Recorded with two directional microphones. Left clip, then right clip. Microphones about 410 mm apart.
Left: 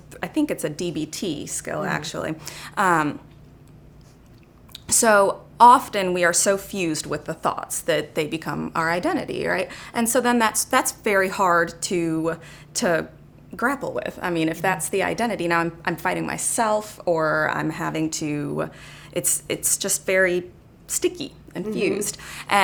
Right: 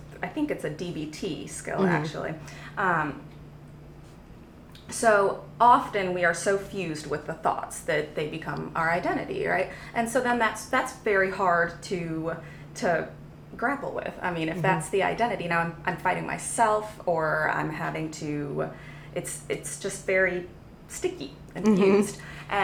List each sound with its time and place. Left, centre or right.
0.2 s a woman's voice: left
4.9 s a woman's voice: left
13.6 s a woman's voice: left